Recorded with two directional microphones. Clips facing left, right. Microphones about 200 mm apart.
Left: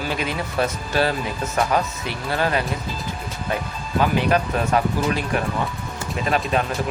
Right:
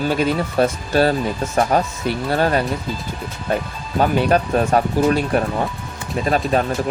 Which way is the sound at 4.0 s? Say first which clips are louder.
Right 3 dB; 40° right (ahead or behind).